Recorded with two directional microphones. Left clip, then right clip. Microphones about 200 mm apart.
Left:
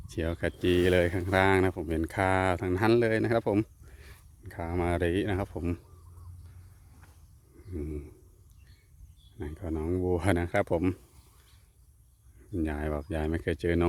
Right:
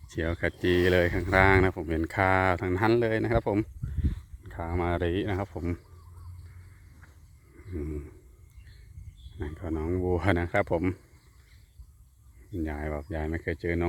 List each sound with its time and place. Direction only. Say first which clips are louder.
0.1 s speech: right 2 dB; 10° left (ahead or behind)
7.7 s a sound: right 1 dB; 5° left (ahead or behind)
9.4 s speech: right 1 dB; 10° left (ahead or behind)
12.5 s speech: left 1 dB; 20° left (ahead or behind)